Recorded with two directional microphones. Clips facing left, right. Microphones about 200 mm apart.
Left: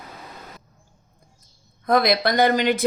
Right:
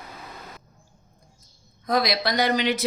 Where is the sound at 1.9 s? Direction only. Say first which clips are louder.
Left 4 dB; 55° left (ahead or behind).